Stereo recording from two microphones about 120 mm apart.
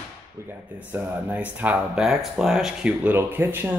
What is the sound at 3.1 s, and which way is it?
Speech, 20° right (ahead or behind).